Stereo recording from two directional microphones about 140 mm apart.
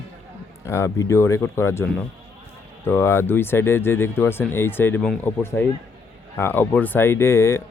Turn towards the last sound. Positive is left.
turn(degrees=20)  # may be behind; listen again after turning